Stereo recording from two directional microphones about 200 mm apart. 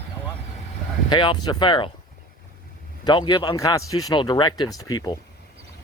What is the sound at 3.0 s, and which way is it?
Speech, 20° left (ahead or behind).